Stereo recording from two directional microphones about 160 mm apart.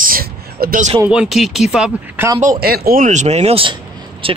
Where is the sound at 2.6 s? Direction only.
70° right (ahead or behind); by 4.4 s 35° right (ahead or behind).